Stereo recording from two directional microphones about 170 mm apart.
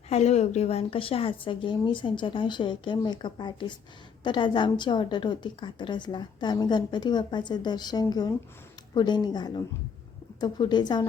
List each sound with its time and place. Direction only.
0.1 s a woman's voice: 40° left (ahead or behind)